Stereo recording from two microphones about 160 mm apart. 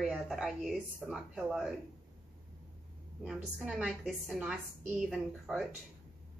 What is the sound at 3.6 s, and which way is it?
A woman's voice, 5° right (ahead or behind).